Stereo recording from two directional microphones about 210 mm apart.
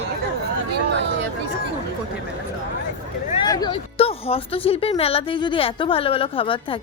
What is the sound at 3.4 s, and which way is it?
A woman's voice, 20° left (ahead or behind).